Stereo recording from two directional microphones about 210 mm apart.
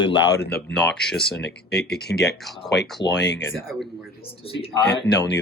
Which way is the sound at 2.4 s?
Centre (ahead or behind).